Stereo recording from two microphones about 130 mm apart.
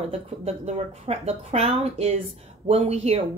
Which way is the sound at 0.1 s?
55° right (ahead or behind).